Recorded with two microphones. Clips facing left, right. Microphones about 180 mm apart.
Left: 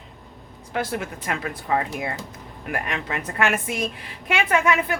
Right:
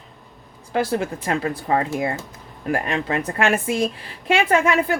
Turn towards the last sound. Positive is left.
turn(degrees=-30)  # may be behind; listen again after turning